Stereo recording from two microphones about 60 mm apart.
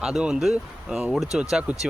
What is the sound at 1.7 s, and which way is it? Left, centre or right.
Speech, right.